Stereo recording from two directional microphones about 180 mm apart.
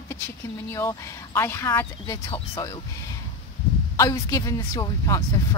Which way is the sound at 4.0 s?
20° left (ahead or behind).